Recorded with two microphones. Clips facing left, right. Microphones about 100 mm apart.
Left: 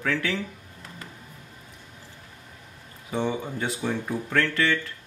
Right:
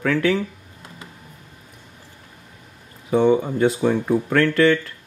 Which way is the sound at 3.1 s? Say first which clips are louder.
Right 11 dB; 55° right (ahead or behind).